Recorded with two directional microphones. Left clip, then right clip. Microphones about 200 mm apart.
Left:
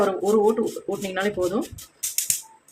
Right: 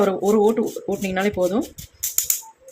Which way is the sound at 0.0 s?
25° right (ahead or behind).